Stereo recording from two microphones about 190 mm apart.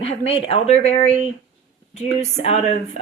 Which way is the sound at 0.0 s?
30° left (ahead or behind).